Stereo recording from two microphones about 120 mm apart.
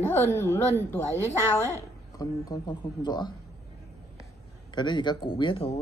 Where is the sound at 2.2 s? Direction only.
35° left (ahead or behind).